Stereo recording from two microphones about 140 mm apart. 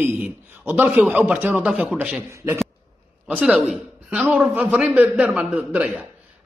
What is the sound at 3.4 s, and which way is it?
Speech, 5° right (ahead or behind).